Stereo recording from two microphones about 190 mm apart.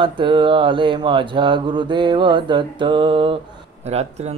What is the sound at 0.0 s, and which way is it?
Speech, 25° right (ahead or behind).